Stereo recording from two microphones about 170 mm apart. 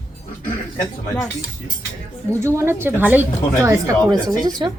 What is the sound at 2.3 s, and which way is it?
A man's voice, 15° right (ahead or behind).